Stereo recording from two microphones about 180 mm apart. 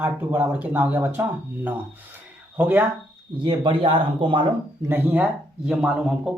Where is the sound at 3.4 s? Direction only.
25° right (ahead or behind).